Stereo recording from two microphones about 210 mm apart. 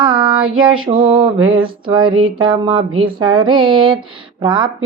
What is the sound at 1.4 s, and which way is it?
Music, 75° right (ahead or behind).